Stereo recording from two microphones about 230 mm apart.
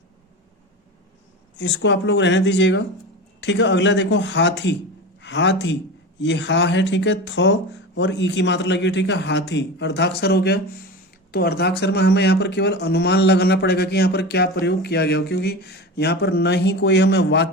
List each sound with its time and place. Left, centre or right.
1.5 s speech: left